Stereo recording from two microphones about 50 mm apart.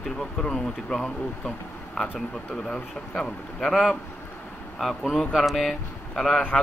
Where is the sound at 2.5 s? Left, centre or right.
Centre.